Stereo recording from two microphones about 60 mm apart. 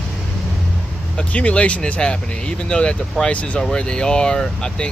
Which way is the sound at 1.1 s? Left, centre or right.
Centre.